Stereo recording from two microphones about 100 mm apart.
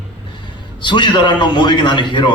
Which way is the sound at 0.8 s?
50° left (ahead or behind).